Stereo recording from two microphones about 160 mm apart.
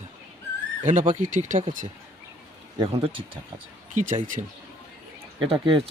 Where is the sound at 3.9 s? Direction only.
50° right (ahead or behind).